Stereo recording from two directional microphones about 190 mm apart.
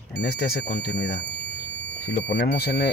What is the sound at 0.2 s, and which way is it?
Speech, 55° left (ahead or behind).